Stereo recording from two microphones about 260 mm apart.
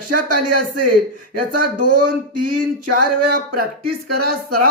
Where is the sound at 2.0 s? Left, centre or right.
Right.